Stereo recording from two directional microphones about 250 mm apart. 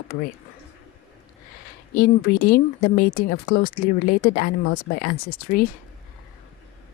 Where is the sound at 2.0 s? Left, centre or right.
Left.